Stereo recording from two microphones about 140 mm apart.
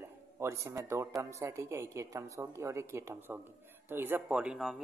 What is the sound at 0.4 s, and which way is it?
A man's voice, 20° right (ahead or behind).